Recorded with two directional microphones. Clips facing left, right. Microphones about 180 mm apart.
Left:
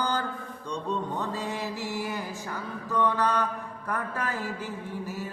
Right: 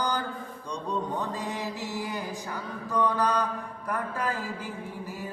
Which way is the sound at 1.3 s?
15° right (ahead or behind).